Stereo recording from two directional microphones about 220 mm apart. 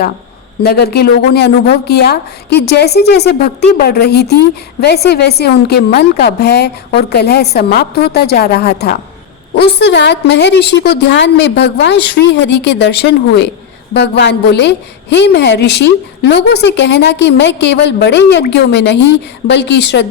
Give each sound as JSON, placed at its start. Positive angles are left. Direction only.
{"t": 0.6, "sound": "a woman's voice", "side_deg": 45}